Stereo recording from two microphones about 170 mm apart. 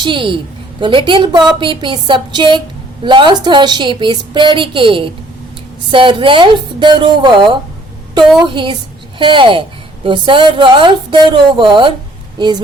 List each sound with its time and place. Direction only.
0.0 s a woman's voice: 30° right (ahead or behind)